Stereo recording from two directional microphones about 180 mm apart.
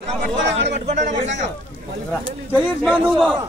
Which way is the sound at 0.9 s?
40° right (ahead or behind).